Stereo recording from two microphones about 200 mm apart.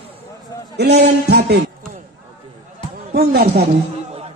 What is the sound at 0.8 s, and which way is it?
Speech, 55° right (ahead or behind).